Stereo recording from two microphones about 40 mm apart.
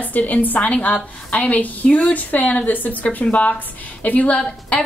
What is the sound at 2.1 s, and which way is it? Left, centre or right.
A woman's voice, left.